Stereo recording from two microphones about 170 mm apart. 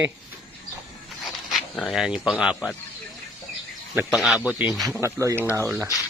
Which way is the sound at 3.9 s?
5° right (ahead or behind).